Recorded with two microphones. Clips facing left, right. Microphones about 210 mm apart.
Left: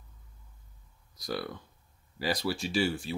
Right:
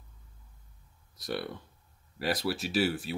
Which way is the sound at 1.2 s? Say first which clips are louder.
Even; centre (ahead or behind).